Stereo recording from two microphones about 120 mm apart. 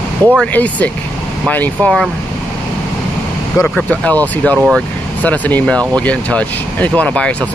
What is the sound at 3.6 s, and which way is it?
Speech, 10° left (ahead or behind).